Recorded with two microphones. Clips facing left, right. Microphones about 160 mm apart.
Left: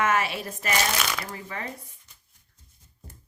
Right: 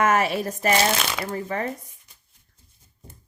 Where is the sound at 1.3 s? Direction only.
45° right (ahead or behind).